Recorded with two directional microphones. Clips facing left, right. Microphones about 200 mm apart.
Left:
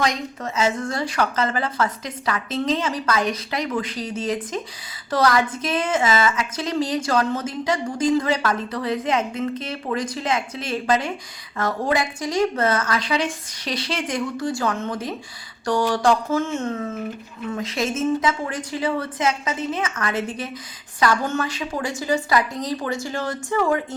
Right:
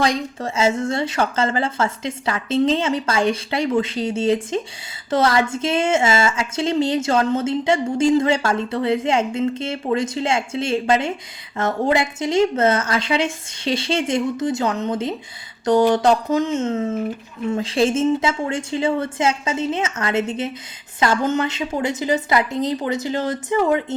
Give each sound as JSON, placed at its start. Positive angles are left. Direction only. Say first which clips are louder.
{"t": 0.0, "sound": "a woman's voice", "louder": "right 3 dB", "side_deg": -30}